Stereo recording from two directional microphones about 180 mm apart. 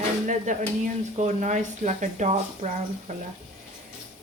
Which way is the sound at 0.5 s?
45° right (ahead or behind).